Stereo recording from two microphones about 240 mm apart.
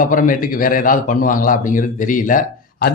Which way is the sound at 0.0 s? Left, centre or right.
Left.